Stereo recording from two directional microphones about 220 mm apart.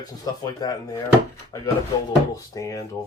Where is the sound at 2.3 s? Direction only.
15° left (ahead or behind).